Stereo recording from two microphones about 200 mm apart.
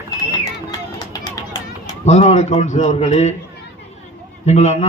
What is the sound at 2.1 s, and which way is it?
A man's voice, 35° left (ahead or behind).